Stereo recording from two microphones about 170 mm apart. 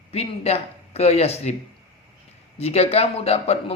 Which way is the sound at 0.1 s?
40° left (ahead or behind).